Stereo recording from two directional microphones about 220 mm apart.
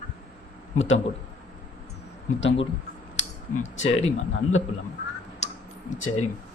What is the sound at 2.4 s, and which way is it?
Speech, 60° left (ahead or behind).